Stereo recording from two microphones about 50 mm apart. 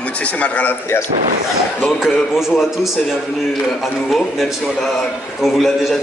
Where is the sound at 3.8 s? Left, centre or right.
Centre.